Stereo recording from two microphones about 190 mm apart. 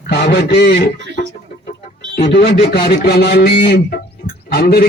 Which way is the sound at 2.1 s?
60° left (ahead or behind).